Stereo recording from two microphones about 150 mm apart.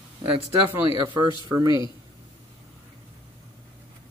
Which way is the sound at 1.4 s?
25° right (ahead or behind).